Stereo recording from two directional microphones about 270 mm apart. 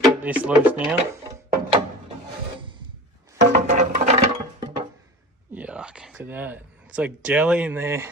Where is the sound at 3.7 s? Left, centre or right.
Right.